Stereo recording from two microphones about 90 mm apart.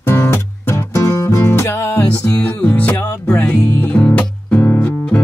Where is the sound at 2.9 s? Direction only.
30° left (ahead or behind).